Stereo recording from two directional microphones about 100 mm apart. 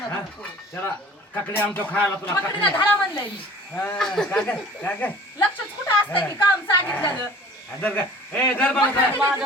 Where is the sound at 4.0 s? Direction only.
5° left (ahead or behind).